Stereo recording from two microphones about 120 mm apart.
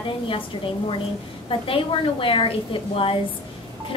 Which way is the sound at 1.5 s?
50° left (ahead or behind).